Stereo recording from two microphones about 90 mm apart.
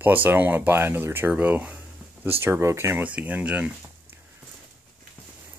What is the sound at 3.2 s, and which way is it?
Speech, 15° right (ahead or behind).